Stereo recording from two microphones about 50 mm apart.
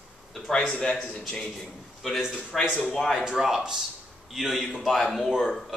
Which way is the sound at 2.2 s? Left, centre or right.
Centre.